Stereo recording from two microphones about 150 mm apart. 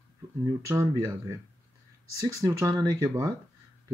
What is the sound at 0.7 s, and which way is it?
Speech, 20° right (ahead or behind).